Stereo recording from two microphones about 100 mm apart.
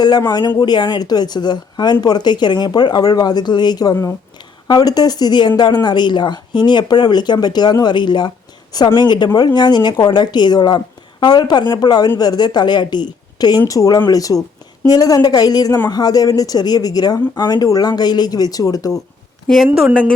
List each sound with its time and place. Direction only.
0.0 s speech: 45° left (ahead or behind)
19.9 s a woman's voice: 10° left (ahead or behind)